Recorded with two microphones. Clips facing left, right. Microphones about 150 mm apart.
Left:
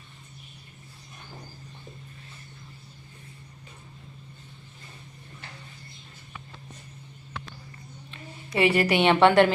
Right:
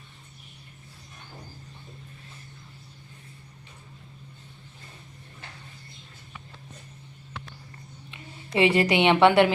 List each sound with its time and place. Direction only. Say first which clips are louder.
8.5 s a woman's voice: right 1 dB; 25° right (ahead or behind)